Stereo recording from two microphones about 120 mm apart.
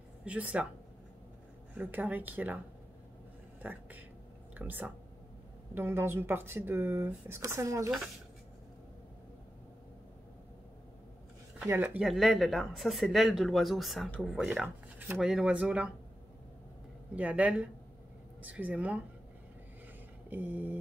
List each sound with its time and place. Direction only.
0.2 s speech: 10° right (ahead or behind)
1.8 s speech: 15° right (ahead or behind)
3.6 s speech: 15° right (ahead or behind)
11.6 s speech: 15° right (ahead or behind)
12.0 s speech: centre (ahead or behind)
17.1 s speech: 10° right (ahead or behind)
20.2 s speech: 15° right (ahead or behind)